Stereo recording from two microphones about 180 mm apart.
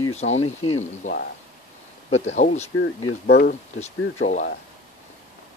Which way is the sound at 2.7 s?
75° left (ahead or behind).